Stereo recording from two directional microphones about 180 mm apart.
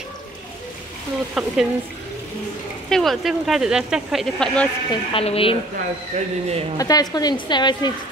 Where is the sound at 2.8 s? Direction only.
Centre (ahead or behind).